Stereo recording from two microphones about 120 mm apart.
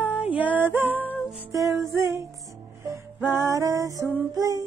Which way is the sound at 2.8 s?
25° right (ahead or behind).